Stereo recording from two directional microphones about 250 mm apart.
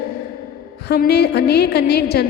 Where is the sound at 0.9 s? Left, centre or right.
Left.